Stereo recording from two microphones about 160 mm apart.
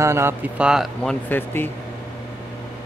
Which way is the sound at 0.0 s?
15° right (ahead or behind).